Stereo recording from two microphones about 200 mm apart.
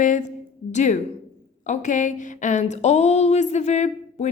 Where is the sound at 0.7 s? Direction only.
35° left (ahead or behind).